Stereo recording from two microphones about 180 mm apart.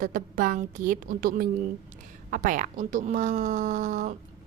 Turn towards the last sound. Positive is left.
turn(degrees=-40)  # may be behind; listen again after turning